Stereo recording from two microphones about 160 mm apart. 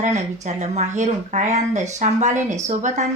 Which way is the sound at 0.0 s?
50° right (ahead or behind).